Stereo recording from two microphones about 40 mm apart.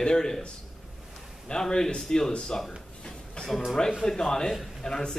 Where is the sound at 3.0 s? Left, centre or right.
Left.